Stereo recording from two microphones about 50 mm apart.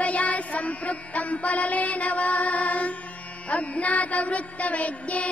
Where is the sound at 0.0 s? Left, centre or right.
Left.